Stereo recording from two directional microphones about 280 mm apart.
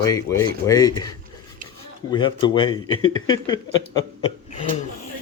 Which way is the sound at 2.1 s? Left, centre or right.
Centre.